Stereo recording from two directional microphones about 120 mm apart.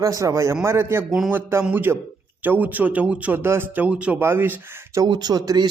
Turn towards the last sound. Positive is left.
turn(degrees=-35)  # may be behind; listen again after turning